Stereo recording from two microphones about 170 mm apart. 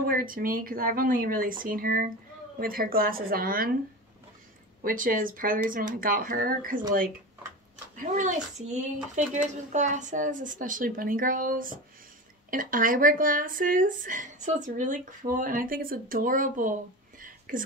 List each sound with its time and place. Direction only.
0.0 s speech: 55° right (ahead or behind)
4.8 s speech: 55° right (ahead or behind)
8.1 s speech: 45° right (ahead or behind)